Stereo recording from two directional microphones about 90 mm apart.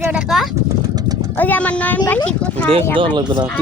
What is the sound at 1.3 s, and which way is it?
Speech, 20° left (ahead or behind).